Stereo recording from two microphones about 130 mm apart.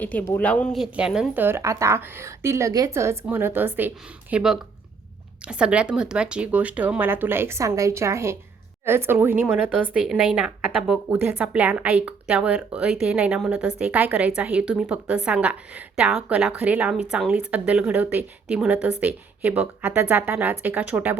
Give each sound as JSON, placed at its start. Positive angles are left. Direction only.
{"t": 0.0, "sound": "speech", "side_deg": 10}